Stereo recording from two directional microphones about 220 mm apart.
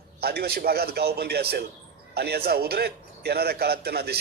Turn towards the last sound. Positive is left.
turn(degrees=-45)  # may be behind; listen again after turning